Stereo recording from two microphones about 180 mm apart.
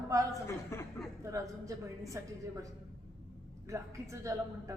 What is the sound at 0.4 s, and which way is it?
Speech, 15° left (ahead or behind).